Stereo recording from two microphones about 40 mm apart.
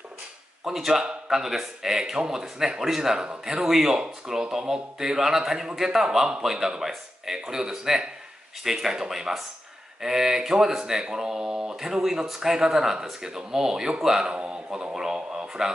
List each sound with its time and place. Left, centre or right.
0.7 s speech: centre
14.2 s speech: right